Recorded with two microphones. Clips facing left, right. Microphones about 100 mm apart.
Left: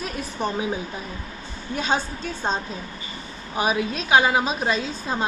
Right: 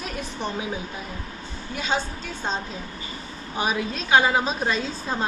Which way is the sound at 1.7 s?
25° left (ahead or behind).